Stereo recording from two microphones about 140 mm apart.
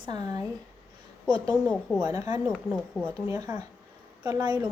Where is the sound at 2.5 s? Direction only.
5° left (ahead or behind).